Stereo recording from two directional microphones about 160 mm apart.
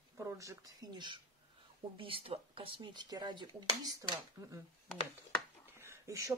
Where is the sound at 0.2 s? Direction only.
20° right (ahead or behind).